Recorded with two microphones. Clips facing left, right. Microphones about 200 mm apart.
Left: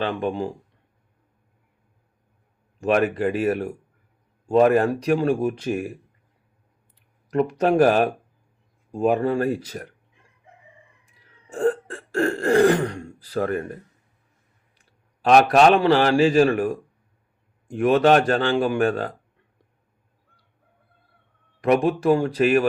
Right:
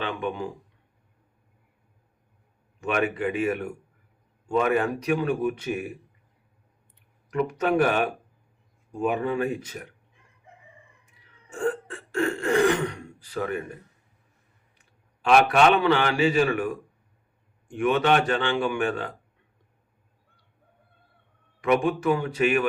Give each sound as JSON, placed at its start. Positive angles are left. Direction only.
{"t": 0.0, "sound": "speech", "side_deg": 35}
{"t": 2.8, "sound": "speech", "side_deg": 40}
{"t": 7.3, "sound": "speech", "side_deg": 35}
{"t": 11.4, "sound": "throat clearing", "side_deg": 35}
{"t": 13.2, "sound": "speech", "side_deg": 35}
{"t": 14.8, "sound": "a man's voice", "side_deg": 40}
{"t": 17.7, "sound": "speech", "side_deg": 35}
{"t": 21.6, "sound": "speech", "side_deg": 35}